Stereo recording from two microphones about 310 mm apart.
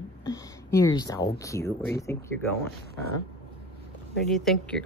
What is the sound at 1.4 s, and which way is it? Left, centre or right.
Speech, centre.